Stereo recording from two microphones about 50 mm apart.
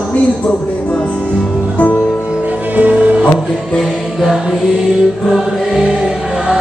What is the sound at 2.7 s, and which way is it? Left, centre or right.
Music, right.